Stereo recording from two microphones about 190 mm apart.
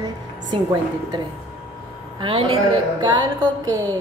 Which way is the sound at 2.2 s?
25° right (ahead or behind).